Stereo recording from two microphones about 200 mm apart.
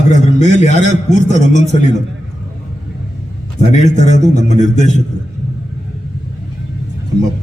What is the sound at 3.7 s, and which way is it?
A man's voice, 35° left (ahead or behind).